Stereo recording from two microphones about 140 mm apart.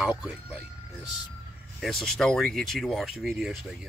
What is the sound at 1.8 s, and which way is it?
Speech, centre (ahead or behind).